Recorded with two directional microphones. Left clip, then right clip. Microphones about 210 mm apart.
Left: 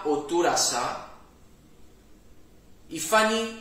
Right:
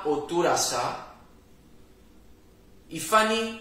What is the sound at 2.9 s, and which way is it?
Speech, 15° left (ahead or behind).